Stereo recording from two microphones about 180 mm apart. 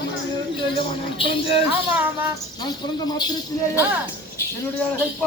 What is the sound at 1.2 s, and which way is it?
Speech, 30° left (ahead or behind).